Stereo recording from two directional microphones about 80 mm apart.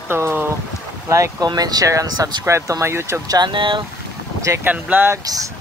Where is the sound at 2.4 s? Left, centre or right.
Right.